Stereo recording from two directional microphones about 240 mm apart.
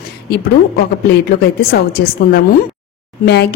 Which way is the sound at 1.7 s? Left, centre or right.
Left.